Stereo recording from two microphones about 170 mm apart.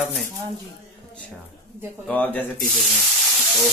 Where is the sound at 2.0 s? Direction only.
10° left (ahead or behind).